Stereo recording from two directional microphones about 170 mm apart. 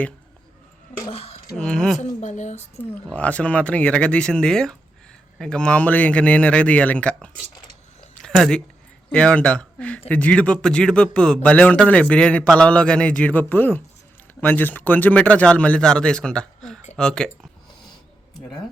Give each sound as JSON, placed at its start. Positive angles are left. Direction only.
{"t": 1.1, "sound": "a sound", "side_deg": 35}
{"t": 1.5, "sound": "speech", "side_deg": 5}
{"t": 2.2, "sound": "speech", "side_deg": 45}
{"t": 2.9, "sound": "a man's voice", "side_deg": 10}